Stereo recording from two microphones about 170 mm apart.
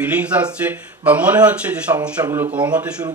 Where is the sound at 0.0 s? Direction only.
10° right (ahead or behind).